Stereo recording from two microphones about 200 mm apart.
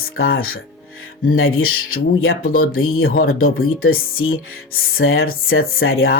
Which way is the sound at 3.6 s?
90° left.